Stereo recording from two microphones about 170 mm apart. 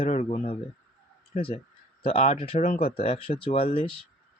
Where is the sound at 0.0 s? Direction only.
40° left (ahead or behind).